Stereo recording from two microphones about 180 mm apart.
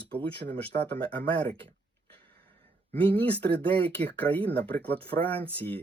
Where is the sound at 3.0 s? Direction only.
10° left (ahead or behind).